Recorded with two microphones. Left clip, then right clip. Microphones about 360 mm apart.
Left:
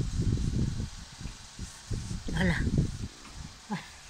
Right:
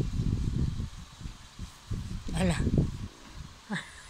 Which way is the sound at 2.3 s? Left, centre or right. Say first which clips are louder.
Left 1 dB; centre.